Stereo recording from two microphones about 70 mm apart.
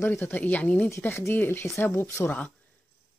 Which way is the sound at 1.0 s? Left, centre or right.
Left.